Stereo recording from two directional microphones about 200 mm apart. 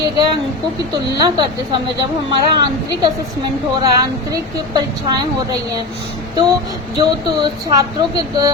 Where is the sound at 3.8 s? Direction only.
20° right (ahead or behind).